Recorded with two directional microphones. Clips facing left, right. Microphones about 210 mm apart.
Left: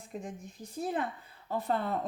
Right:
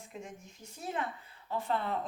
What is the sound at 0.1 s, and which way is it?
Speech, 35° left (ahead or behind).